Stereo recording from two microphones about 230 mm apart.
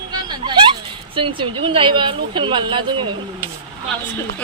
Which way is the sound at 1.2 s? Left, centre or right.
Right.